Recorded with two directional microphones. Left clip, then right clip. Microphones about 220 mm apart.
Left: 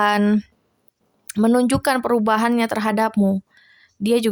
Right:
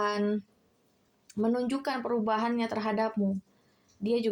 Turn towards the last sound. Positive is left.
turn(degrees=40)  # may be behind; listen again after turning